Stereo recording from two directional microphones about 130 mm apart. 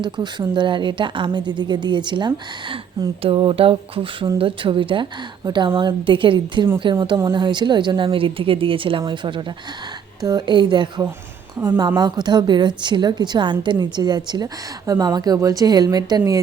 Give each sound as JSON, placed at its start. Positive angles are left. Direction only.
{"t": 0.0, "sound": "a woman's voice", "side_deg": -35}